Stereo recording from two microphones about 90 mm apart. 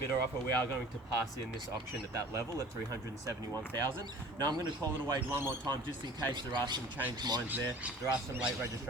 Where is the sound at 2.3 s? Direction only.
35° right (ahead or behind); by 4.9 s 50° right (ahead or behind).